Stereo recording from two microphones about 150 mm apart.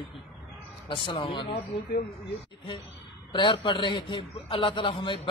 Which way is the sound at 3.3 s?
35° left (ahead or behind).